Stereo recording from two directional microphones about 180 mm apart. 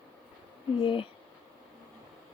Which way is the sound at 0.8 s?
25° left (ahead or behind).